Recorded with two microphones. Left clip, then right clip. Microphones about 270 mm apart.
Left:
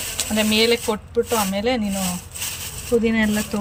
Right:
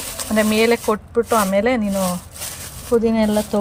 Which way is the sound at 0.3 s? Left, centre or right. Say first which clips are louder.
Right 2 dB; centre.